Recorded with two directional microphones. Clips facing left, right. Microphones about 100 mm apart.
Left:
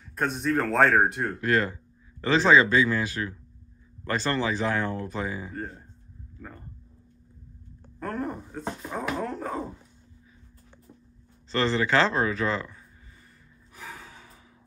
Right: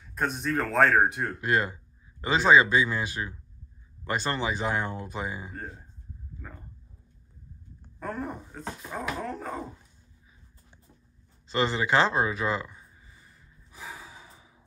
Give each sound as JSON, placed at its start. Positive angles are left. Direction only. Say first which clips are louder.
{"t": 0.1, "sound": "speech", "louder": "left 3 dB", "side_deg": 0}
{"t": 1.4, "sound": "speech", "louder": "left 2 dB", "side_deg": -15}
{"t": 5.5, "sound": "speech", "louder": "left 4 dB", "side_deg": -5}
{"t": 8.0, "sound": "speech", "louder": "left 3 dB", "side_deg": 0}
{"t": 11.4, "sound": "speech", "louder": "left 2 dB", "side_deg": -15}
{"t": 13.7, "sound": "gasp", "louder": "even", "side_deg": -10}